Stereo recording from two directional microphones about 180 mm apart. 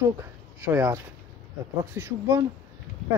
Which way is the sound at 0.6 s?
10° right (ahead or behind).